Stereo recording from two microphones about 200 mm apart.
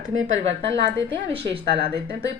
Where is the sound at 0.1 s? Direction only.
70° right (ahead or behind).